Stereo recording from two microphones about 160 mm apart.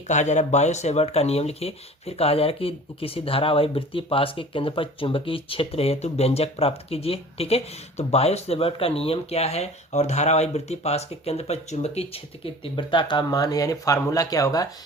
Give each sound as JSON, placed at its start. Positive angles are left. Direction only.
{"t": 0.1, "sound": "speech", "side_deg": 45}
{"t": 12.6, "sound": "speech", "side_deg": 30}